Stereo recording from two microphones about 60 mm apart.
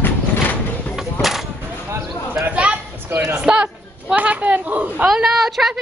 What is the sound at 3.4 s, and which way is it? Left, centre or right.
A woman's voice, centre.